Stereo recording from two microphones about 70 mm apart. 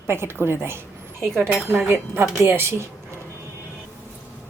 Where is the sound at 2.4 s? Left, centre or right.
Right.